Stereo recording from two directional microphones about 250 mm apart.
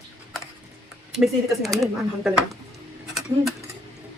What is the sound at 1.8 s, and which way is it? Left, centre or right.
Speech, centre.